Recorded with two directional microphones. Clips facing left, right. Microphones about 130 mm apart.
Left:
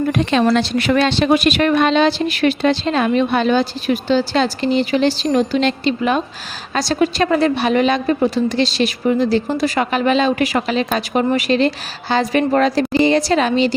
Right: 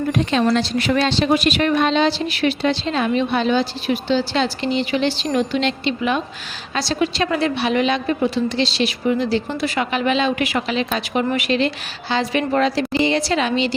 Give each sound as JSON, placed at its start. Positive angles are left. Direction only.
{"t": 0.1, "sound": "a woman's voice", "side_deg": 65}